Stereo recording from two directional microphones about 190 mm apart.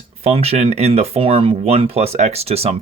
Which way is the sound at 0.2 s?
35° right (ahead or behind).